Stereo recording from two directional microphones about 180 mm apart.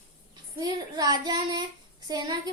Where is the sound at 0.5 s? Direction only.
20° right (ahead or behind).